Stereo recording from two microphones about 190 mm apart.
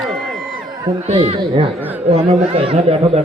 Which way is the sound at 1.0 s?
35° right (ahead or behind).